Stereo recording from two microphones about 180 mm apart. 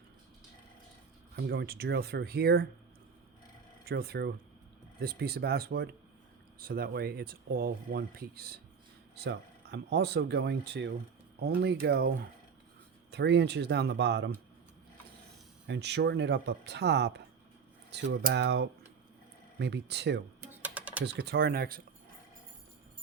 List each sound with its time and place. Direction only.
1.4 s speech: 60° right (ahead or behind)
3.8 s speech: 60° right (ahead or behind)
15.6 s speech: 80° right
20.7 s computer keyboard: 10° right (ahead or behind)
21.2 s speech: 60° right (ahead or behind)